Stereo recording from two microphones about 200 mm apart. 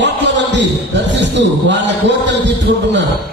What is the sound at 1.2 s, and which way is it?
A man's voice, 60° right (ahead or behind).